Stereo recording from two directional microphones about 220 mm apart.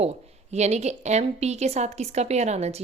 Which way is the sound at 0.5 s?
30° right (ahead or behind).